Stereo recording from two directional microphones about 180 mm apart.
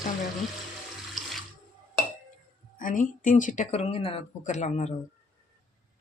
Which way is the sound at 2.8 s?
45° left (ahead or behind).